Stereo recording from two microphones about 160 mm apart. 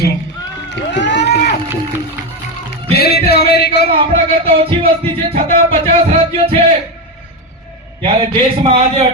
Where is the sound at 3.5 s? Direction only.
90° left.